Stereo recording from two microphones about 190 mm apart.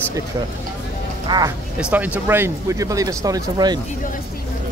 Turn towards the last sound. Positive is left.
turn(degrees=-20)  # may be behind; listen again after turning